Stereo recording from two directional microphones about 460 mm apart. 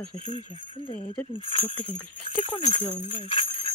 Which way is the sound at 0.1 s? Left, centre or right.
Centre.